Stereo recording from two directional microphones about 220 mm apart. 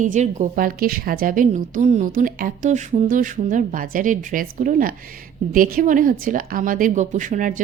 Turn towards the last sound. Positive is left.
turn(degrees=-35)  # may be behind; listen again after turning